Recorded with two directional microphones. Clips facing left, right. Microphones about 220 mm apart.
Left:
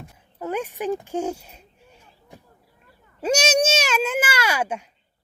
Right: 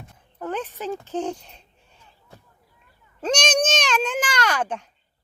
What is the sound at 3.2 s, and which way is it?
Speech, 10° left (ahead or behind).